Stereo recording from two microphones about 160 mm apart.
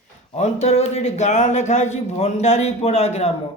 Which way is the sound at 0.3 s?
45° left (ahead or behind).